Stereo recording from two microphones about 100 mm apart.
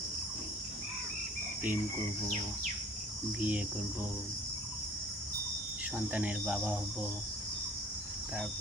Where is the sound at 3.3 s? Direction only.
10° right (ahead or behind).